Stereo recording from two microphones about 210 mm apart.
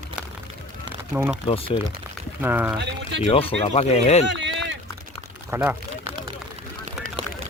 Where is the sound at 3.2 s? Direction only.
25° left (ahead or behind).